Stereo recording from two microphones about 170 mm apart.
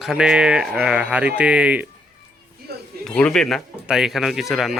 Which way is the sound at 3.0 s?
5° left (ahead or behind).